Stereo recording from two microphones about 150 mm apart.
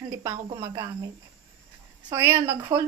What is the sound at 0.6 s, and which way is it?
Speech, 20° right (ahead or behind).